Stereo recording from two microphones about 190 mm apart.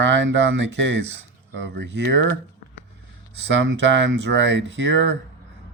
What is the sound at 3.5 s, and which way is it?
Speech, 75° right (ahead or behind).